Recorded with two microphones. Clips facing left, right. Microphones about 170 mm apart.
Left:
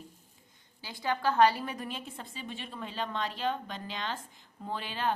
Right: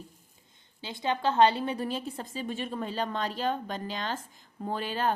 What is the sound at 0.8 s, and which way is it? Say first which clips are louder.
A woman's voice: right 3 dB; 20° right (ahead or behind).